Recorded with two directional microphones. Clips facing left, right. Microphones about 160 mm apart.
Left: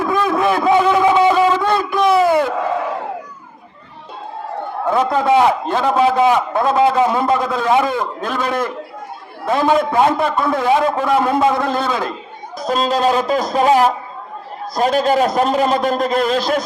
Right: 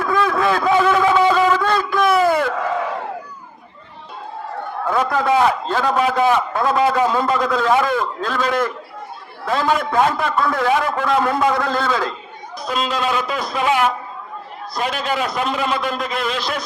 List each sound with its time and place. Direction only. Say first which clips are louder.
0.0 s a sound: left 2 dB; 20° left (ahead or behind)
4.9 s a man's voice: left 3 dB; 25° left (ahead or behind)
12.5 s a man's voice: left 5 dB; 40° left (ahead or behind)